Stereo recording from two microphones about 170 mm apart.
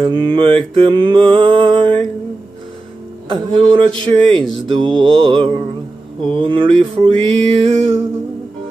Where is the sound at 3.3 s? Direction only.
30° right (ahead or behind).